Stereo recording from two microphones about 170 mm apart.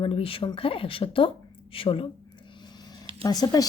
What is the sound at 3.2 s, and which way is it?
Speech, 25° left (ahead or behind).